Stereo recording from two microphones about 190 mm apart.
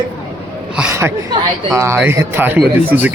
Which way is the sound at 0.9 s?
15° right (ahead or behind).